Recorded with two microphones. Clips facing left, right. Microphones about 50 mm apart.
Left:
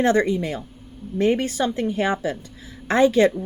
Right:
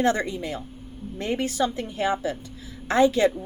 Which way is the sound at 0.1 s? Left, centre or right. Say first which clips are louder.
Left 6 dB; left.